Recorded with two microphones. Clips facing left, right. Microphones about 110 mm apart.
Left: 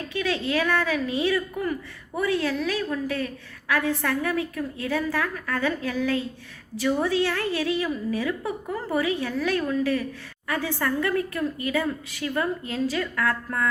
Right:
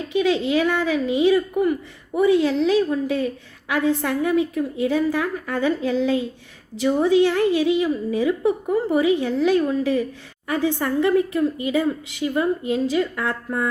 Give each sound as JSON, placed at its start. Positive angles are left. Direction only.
{"t": 0.1, "sound": "a woman's voice", "side_deg": -20}